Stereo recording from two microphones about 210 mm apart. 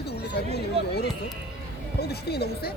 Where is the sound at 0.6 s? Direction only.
50° left (ahead or behind).